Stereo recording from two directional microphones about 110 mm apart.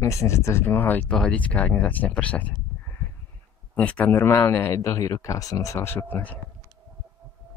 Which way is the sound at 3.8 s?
15° left (ahead or behind).